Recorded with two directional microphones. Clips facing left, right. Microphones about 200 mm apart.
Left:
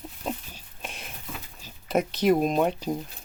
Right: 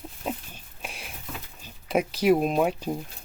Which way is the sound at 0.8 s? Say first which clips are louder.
Even; 5° right (ahead or behind).